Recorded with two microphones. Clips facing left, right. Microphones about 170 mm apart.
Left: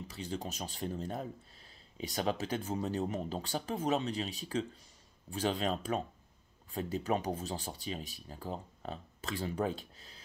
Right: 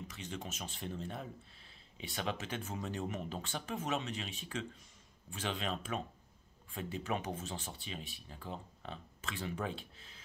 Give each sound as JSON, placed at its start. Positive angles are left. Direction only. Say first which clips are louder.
{"t": 0.1, "sound": "speech", "louder": "left 5 dB", "side_deg": 35}